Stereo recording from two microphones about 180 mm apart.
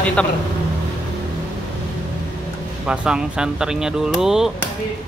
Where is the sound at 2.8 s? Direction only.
5° right (ahead or behind).